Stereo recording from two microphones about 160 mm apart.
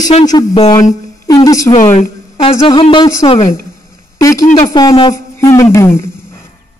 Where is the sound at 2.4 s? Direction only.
35° left (ahead or behind).